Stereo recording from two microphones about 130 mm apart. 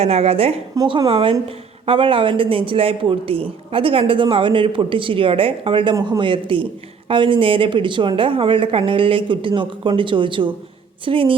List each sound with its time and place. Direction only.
0.0 s a woman's voice: 55° right (ahead or behind)